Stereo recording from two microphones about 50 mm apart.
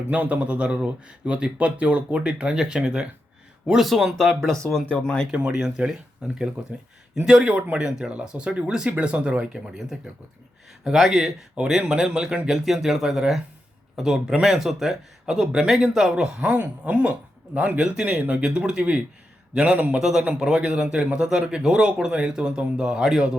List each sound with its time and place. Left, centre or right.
0.1 s speech: right
1.5 s speech: right
2.2 s speech: centre
3.8 s speech: centre
5.0 s speech: centre
5.3 s speech: right
5.5 s speech: centre
6.6 s speech: right
7.3 s speech: centre
7.5 s speech: right
10.9 s speech: centre
11.5 s speech: centre
20.0 s speech: centre